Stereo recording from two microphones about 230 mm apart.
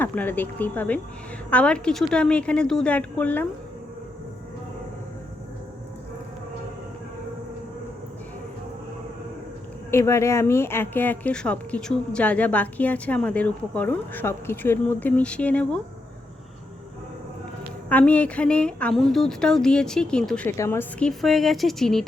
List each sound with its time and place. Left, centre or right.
0.0 s speech: centre
9.9 s speech: centre
17.8 s speech: centre